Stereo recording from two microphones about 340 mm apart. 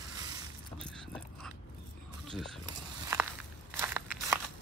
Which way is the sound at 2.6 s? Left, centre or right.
Centre.